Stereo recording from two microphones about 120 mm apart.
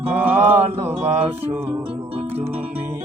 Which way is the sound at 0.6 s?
55° right (ahead or behind).